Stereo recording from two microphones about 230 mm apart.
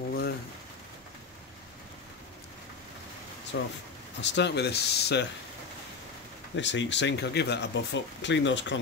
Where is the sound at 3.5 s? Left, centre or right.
Left.